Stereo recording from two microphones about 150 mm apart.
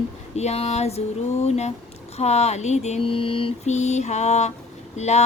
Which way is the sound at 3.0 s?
35° left (ahead or behind).